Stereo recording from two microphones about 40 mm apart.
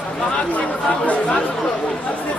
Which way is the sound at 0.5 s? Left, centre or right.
Left.